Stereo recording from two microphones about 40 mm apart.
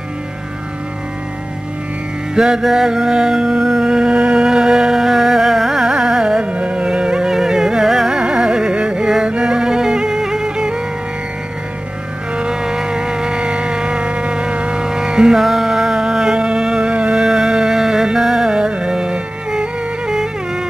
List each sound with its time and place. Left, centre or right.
2.3 s music: centre
6.4 s music: right
7.2 s carnatic music: centre
8.2 s carnatic music: right
9.2 s music: right
12.4 s vehicle: centre
15.3 s music: centre